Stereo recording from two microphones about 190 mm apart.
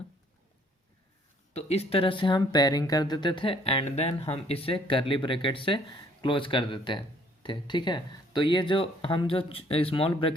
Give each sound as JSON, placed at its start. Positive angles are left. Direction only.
{"t": 1.5, "sound": "speech", "side_deg": 35}